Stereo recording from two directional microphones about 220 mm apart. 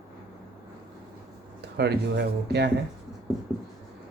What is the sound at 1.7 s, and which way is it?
Speech, 50° right (ahead or behind).